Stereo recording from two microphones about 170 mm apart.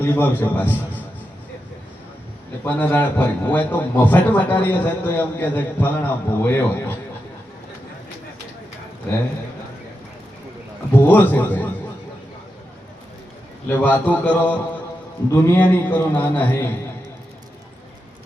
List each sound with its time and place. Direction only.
0.0 s a man's voice: 10° left (ahead or behind)
2.6 s a man's voice: 10° left (ahead or behind)
11.1 s a man's voice: 10° left (ahead or behind)
13.7 s a man's voice: 10° left (ahead or behind)